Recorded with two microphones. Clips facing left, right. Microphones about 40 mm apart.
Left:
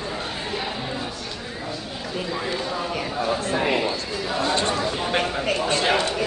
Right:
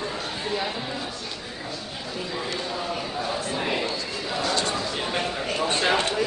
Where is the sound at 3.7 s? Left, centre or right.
Centre.